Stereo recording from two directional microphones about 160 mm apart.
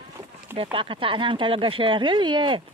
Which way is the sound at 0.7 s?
35° right (ahead or behind).